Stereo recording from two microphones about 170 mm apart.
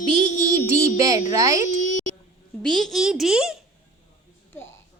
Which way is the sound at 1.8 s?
50° left (ahead or behind).